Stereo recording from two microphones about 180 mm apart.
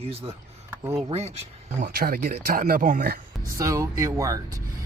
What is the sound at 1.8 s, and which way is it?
Speech, 60° right (ahead or behind).